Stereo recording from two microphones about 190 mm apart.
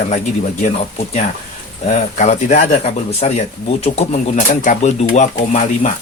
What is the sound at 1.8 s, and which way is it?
Speech, 40° left (ahead or behind).